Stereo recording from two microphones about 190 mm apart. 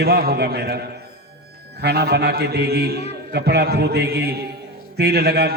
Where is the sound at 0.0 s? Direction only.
55° right (ahead or behind).